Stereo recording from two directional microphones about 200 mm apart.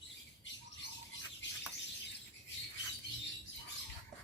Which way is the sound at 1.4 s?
65° left (ahead or behind).